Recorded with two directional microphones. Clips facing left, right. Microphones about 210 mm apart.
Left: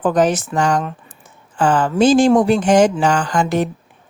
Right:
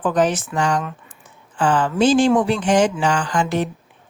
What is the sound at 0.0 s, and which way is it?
Speech, 40° left (ahead or behind).